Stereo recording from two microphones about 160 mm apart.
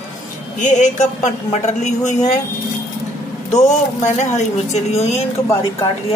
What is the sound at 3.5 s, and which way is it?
Speech, 50° left (ahead or behind).